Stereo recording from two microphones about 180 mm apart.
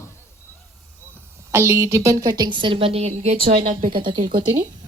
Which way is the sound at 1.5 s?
15° right (ahead or behind).